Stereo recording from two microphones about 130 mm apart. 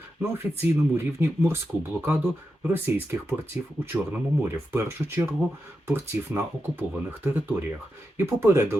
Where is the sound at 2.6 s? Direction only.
15° right (ahead or behind).